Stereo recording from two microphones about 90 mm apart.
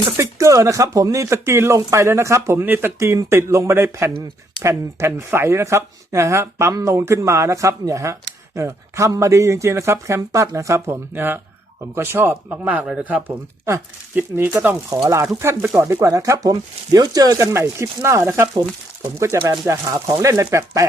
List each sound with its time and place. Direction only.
0.2 s speech: 35° right (ahead or behind)
14.9 s speech: 35° right (ahead or behind)